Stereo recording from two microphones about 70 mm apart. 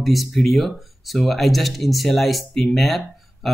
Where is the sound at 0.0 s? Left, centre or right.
Centre.